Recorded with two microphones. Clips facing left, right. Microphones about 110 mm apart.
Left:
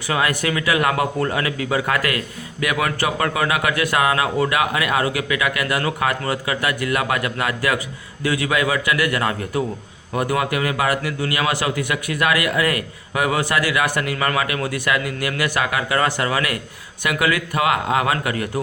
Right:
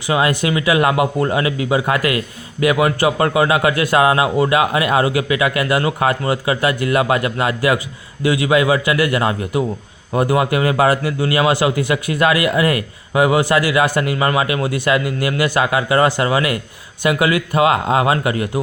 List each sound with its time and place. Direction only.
0.1 s speech: 20° right (ahead or behind)